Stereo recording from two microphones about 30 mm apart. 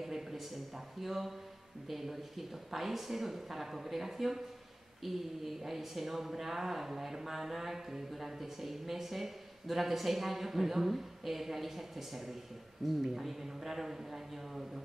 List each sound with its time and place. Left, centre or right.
0.0 s a man's voice: centre